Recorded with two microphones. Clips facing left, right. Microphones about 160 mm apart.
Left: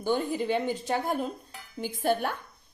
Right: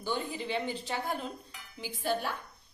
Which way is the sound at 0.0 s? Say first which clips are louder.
Left 7 dB; 50° left (ahead or behind).